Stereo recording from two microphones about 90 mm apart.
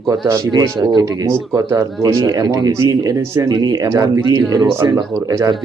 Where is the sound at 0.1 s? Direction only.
40° right (ahead or behind).